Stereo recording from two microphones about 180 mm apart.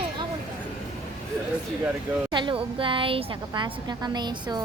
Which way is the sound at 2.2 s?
25° right (ahead or behind).